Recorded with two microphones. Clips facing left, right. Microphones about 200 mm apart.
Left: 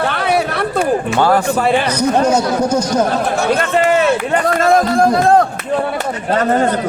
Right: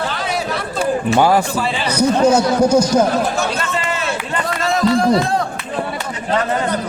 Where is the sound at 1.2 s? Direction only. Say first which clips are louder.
Even; 10° right (ahead or behind).